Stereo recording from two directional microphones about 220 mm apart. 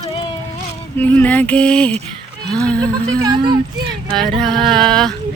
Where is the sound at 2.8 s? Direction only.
15° right (ahead or behind).